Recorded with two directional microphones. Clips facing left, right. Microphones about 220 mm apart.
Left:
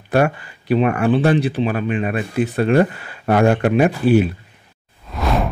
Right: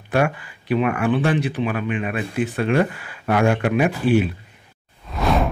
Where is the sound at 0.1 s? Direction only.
40° left (ahead or behind).